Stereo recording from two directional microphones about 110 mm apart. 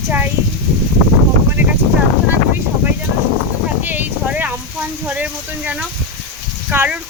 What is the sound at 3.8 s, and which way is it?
Speech, 15° right (ahead or behind).